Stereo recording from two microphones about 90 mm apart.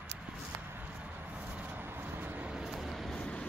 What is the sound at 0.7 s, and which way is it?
Vehicle, 20° right (ahead or behind).